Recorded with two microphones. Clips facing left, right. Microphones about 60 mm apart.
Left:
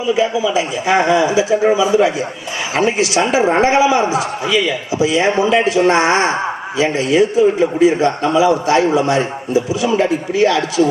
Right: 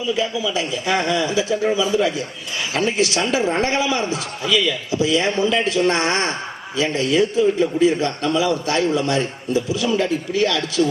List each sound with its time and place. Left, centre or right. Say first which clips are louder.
0.0 s a man's voice: left 6 dB; left